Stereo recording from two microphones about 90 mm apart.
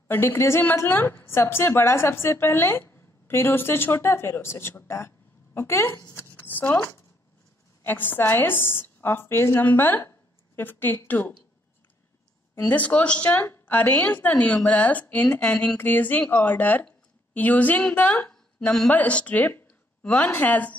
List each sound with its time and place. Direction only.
0.1 s a woman's voice: 25° left (ahead or behind)
6.1 s a sound: 25° left (ahead or behind)
7.8 s a woman's voice: 20° left (ahead or behind)
12.6 s a woman's voice: 20° left (ahead or behind)